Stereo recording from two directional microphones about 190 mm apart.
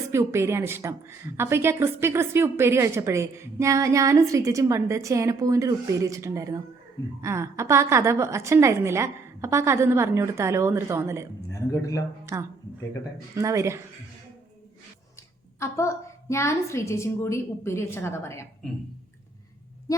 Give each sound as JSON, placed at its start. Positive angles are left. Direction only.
{"t": 0.1, "sound": "a woman's voice", "side_deg": -15}
{"t": 11.5, "sound": "a woman's voice", "side_deg": 15}
{"t": 12.3, "sound": "a woman's voice", "side_deg": -15}
{"t": 15.5, "sound": "a woman's voice", "side_deg": 15}